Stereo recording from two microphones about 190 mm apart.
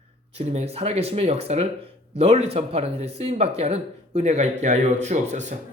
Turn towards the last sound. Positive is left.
turn(degrees=-40)  # may be behind; listen again after turning